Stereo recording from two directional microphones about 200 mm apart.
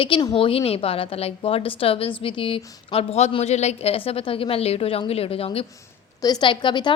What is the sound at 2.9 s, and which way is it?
A woman's voice, 30° left (ahead or behind).